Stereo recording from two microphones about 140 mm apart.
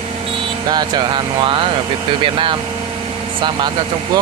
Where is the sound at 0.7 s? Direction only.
30° right (ahead or behind).